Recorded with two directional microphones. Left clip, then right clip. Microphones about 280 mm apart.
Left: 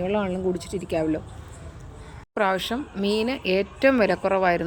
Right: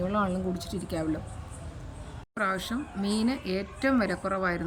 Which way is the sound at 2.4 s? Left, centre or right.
Centre.